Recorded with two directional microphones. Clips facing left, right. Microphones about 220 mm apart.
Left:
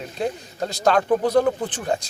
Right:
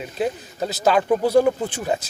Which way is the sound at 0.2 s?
5° right (ahead or behind).